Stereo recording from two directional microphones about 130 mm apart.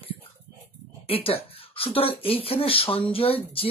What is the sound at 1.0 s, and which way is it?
Speech, 45° left (ahead or behind).